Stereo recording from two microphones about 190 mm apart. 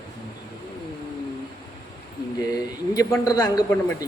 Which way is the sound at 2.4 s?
20° left (ahead or behind).